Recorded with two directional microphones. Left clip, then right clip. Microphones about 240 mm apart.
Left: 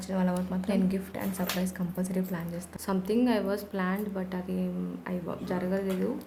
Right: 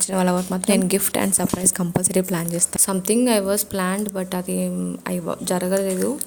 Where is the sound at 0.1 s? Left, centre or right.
Right.